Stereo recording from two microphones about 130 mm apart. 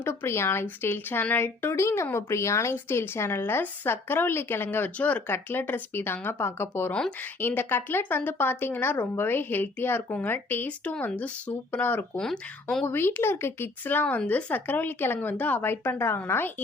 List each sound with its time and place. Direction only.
0.0 s speech: 20° left (ahead or behind)
12.8 s speech: 15° left (ahead or behind)